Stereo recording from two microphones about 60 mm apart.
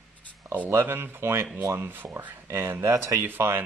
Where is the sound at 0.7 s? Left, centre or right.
Right.